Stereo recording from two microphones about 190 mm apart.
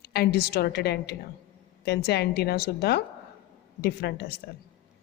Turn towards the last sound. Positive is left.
turn(degrees=55)  # may be behind; listen again after turning